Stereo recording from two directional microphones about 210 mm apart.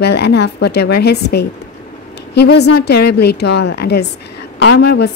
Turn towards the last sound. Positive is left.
turn(degrees=55)  # may be behind; listen again after turning